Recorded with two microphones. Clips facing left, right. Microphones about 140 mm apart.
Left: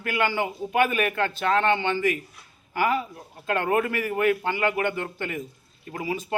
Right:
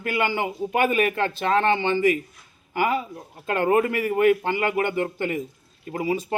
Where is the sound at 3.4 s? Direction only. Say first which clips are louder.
Right 3 dB; 35° right (ahead or behind).